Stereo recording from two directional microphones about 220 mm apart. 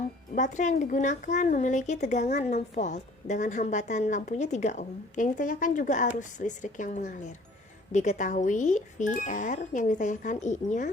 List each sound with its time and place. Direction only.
0.3 s a woman's voice: 35° left (ahead or behind)